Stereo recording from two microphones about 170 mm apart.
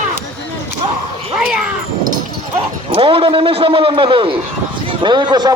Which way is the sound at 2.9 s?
30° right (ahead or behind).